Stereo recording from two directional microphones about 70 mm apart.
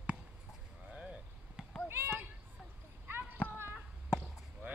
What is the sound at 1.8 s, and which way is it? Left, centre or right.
Basketball bounce, right.